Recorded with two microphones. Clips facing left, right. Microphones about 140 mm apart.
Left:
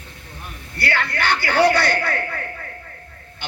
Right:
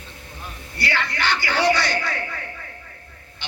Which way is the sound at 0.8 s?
60° left (ahead or behind).